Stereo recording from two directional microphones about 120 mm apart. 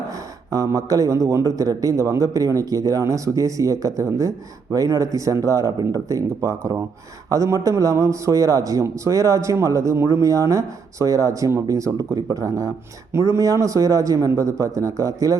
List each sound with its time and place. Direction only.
0.5 s a man's voice: 25° right (ahead or behind)